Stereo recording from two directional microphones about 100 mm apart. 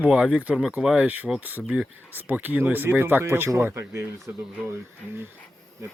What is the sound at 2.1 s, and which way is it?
Speech, 15° right (ahead or behind).